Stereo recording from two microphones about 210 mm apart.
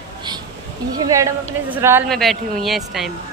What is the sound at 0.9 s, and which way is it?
Speech, 15° right (ahead or behind).